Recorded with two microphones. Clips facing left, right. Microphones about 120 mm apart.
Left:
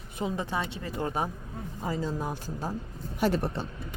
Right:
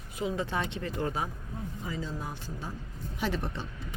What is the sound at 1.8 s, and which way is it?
Speech, 40° left (ahead or behind).